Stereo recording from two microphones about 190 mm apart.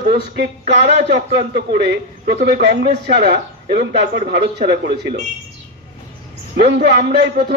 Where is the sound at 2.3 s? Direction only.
60° right (ahead or behind).